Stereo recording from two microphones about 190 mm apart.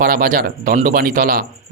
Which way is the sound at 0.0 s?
50° right (ahead or behind).